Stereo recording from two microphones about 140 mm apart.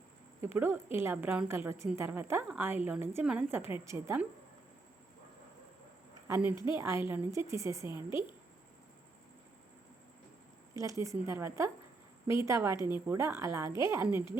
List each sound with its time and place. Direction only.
0.4 s a woman's voice: 15° right (ahead or behind)
6.2 s a woman's voice: 20° right (ahead or behind)
10.8 s speech: 20° right (ahead or behind)